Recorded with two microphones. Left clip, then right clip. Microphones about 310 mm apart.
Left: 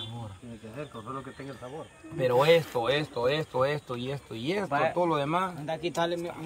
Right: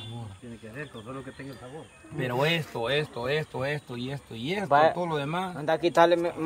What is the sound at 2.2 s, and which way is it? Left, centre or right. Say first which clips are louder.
Speech: left 5 dB; centre.